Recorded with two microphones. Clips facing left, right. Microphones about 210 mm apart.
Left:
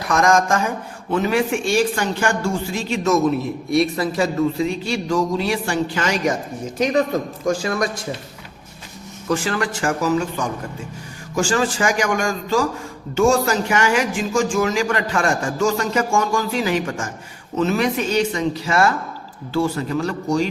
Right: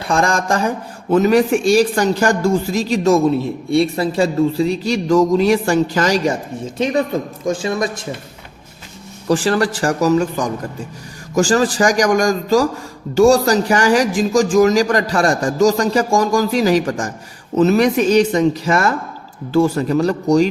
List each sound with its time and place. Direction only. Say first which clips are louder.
0.0 s speech: left 1 dB; 30° right (ahead or behind)
9.3 s speech: right 6 dB; 35° right (ahead or behind)